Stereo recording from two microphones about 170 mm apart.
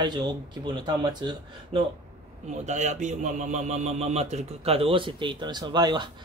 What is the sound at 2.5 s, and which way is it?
Speech, 45° right (ahead or behind).